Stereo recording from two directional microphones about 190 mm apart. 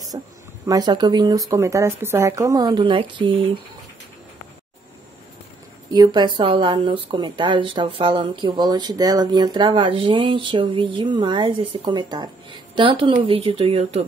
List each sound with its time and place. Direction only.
0.1 s speech: 20° right (ahead or behind)
5.9 s speech: 20° right (ahead or behind)